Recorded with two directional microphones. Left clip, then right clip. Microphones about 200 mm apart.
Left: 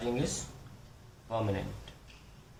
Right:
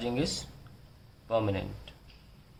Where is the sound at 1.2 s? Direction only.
45° right (ahead or behind).